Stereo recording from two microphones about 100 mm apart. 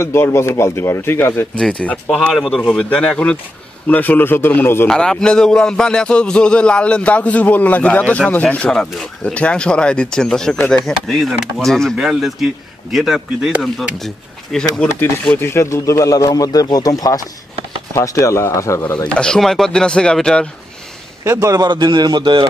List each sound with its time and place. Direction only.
0.0 s a man's voice: 25° left (ahead or behind)
1.6 s a man's voice: 10° left (ahead or behind)
4.8 s a man's voice: 5° left (ahead or behind)
15.3 s a man's voice: 25° left (ahead or behind)
19.0 s a man's voice: 10° left (ahead or behind)
21.2 s a man's voice: 30° right (ahead or behind); by 22.5 s 50° right (ahead or behind)